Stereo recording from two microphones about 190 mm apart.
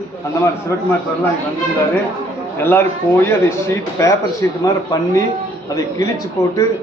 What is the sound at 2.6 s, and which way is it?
A man's voice, 10° left (ahead or behind).